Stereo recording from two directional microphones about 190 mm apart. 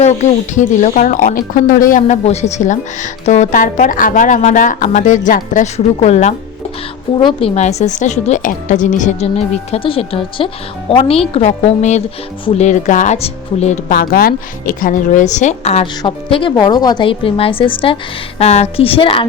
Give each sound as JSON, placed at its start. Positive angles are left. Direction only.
{"t": 0.0, "sound": "speech", "side_deg": 35}
{"t": 9.7, "sound": "speech", "side_deg": 30}
{"t": 13.9, "sound": "speech", "side_deg": 50}